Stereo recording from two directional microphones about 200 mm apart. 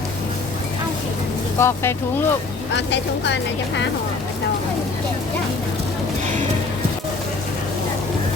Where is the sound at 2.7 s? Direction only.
65° left (ahead or behind).